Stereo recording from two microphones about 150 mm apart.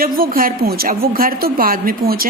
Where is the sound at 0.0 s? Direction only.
75° right (ahead or behind).